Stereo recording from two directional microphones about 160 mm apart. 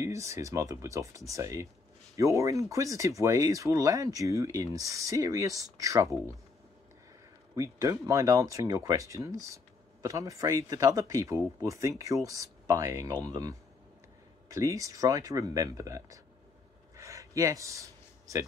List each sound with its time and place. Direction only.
0.0 s speech: 20° right (ahead or behind)
7.5 s speech: 20° right (ahead or behind)
16.9 s a sound: 20° right (ahead or behind)